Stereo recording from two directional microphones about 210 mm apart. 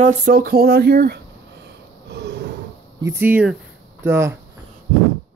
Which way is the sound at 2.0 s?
55° right (ahead or behind).